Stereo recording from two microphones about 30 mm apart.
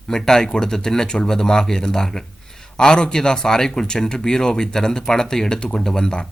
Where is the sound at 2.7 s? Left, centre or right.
Left.